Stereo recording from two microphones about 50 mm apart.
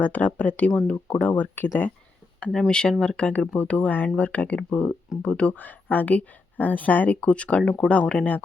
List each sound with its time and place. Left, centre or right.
0.0 s speech: left
2.6 s speech: centre
5.5 s speech: left